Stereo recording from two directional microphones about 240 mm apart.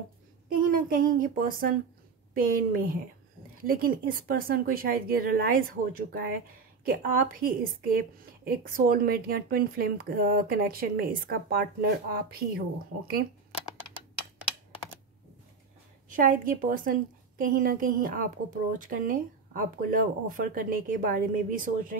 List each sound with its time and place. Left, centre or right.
0.6 s a woman's voice: right
16.2 s a woman's voice: right